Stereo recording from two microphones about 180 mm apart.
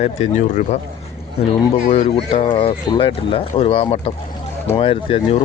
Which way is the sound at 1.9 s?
30° left (ahead or behind).